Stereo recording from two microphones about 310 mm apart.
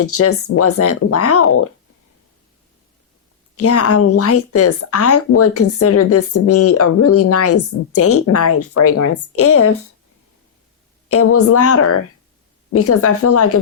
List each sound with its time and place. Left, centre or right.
0.0 s speech: left
3.6 s speech: left
11.1 s speech: left